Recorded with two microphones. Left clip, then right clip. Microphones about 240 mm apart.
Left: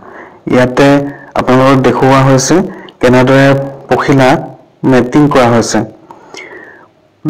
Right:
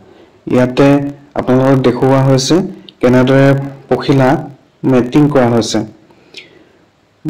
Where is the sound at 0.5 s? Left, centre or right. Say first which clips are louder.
Left 3 dB; centre.